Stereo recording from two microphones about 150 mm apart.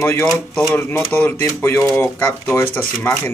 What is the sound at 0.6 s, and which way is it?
Speech, 15° left (ahead or behind).